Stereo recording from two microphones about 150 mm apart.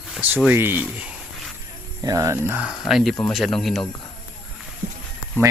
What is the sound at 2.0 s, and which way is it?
Speech, 20° right (ahead or behind).